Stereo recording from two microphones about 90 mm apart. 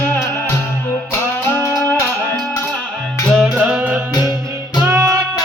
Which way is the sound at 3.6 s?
15° right (ahead or behind).